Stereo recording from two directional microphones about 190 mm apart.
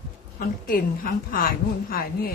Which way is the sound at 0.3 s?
50° left (ahead or behind).